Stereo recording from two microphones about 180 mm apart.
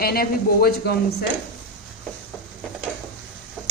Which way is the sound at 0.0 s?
55° left (ahead or behind).